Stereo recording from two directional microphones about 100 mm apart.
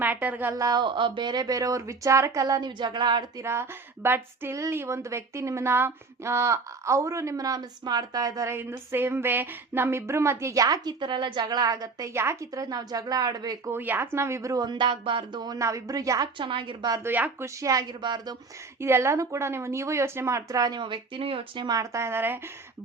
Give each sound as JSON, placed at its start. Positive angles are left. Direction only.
{"t": 0.0, "sound": "a woman's voice", "side_deg": -15}
{"t": 0.6, "sound": "a woman's voice", "side_deg": -45}
{"t": 3.4, "sound": "a woman's voice", "side_deg": -25}
{"t": 8.5, "sound": "a woman's voice", "side_deg": -25}
{"t": 12.1, "sound": "a woman's voice", "side_deg": -25}
{"t": 13.7, "sound": "a woman's voice", "side_deg": -20}
{"t": 15.5, "sound": "a woman's voice", "side_deg": -30}
{"t": 16.4, "sound": "a woman's voice", "side_deg": -55}
{"t": 17.0, "sound": "speech", "side_deg": -15}
{"t": 17.4, "sound": "a woman's voice", "side_deg": -35}
{"t": 18.8, "sound": "a woman's voice", "side_deg": -25}
{"t": 21.7, "sound": "a woman's voice", "side_deg": -35}